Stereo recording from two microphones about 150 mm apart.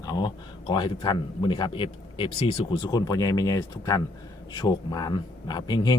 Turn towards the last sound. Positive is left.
turn(degrees=30)  # may be behind; listen again after turning